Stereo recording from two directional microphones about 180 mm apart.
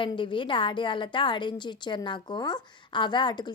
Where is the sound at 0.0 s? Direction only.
25° left (ahead or behind).